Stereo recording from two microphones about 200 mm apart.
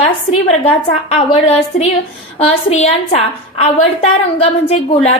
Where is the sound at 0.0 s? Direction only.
30° left (ahead or behind).